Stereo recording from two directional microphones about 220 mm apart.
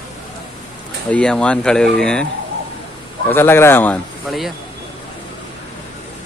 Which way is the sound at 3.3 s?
10° left (ahead or behind).